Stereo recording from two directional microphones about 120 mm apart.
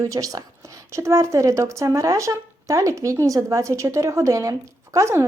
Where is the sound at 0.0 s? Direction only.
30° right (ahead or behind).